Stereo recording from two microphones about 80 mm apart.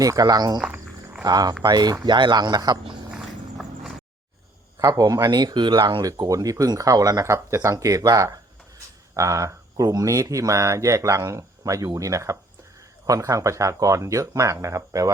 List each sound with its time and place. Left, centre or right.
0.0 s speech: right
2.0 s a man's voice: right
3.1 s walk: centre
4.8 s speech: right
6.1 s speech: right